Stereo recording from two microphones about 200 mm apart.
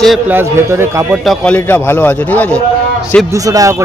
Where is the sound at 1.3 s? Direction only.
5° left (ahead or behind).